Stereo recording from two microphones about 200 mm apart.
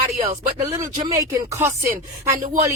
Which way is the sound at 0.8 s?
15° right (ahead or behind).